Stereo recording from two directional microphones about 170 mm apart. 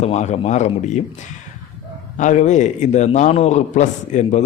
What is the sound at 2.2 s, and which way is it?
Speech, 45° left (ahead or behind).